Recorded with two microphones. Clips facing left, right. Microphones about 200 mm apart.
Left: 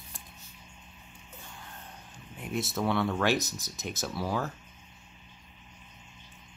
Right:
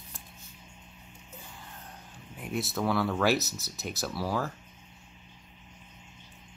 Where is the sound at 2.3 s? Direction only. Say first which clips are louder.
Even; centre (ahead or behind).